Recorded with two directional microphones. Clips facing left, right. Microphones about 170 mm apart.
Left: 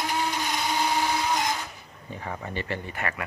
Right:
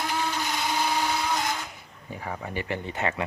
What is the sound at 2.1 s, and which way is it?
Speech, 10° right (ahead or behind).